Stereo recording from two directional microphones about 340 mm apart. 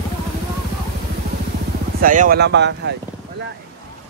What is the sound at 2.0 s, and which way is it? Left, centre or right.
Speech, right.